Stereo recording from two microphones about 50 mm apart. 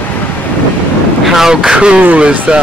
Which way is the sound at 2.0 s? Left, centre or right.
Right.